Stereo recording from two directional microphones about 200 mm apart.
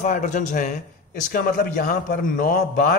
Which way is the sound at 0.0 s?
40° left (ahead or behind).